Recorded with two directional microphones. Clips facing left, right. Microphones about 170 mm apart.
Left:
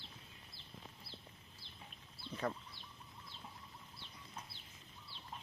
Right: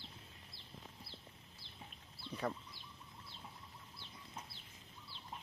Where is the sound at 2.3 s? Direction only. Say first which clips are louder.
Right 1 dB; 35° left (ahead or behind).